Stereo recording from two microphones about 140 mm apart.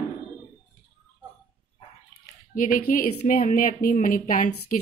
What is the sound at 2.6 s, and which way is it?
Speech, 75° left (ahead or behind).